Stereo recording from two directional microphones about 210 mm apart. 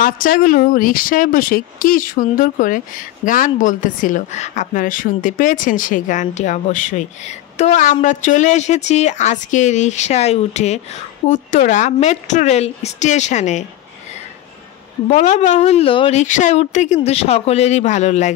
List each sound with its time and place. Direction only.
0.0 s a woman's voice: 45° left (ahead or behind)
15.0 s a woman's voice: 30° left (ahead or behind)